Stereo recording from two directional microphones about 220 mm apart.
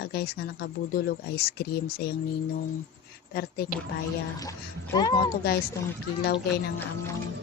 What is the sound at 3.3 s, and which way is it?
Speech, 45° left (ahead or behind).